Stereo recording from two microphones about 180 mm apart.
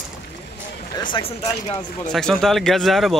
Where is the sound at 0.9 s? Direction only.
25° left (ahead or behind).